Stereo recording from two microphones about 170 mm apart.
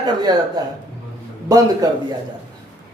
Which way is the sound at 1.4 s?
20° right (ahead or behind).